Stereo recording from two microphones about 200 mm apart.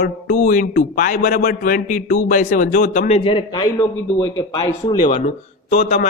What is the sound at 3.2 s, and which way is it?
A man's voice, 25° left (ahead or behind).